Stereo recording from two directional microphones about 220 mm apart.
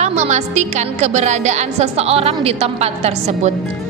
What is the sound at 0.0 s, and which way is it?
A woman's voice, 30° right (ahead or behind).